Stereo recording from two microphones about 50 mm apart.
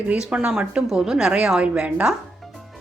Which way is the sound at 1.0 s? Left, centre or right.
Centre.